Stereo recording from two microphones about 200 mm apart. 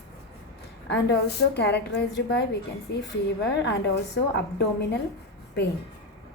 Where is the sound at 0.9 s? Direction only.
55° left (ahead or behind).